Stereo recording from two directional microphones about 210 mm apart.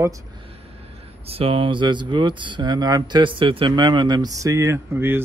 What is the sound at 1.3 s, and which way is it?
Speech, 25° right (ahead or behind).